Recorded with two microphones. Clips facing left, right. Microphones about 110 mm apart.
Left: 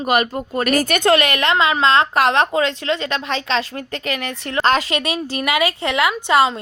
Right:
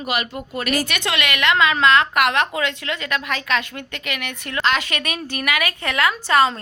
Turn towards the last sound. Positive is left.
turn(degrees=20)  # may be behind; listen again after turning